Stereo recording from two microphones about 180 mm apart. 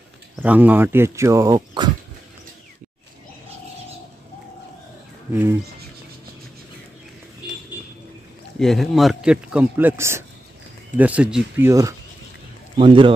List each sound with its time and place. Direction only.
0.4 s speech: 10° right (ahead or behind)
5.3 s speech: 10° right (ahead or behind)
8.5 s a man's voice: centre (ahead or behind); by 11.9 s 15° right (ahead or behind)
12.7 s a man's voice: 30° right (ahead or behind)